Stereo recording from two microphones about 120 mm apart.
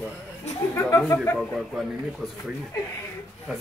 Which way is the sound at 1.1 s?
15° left (ahead or behind).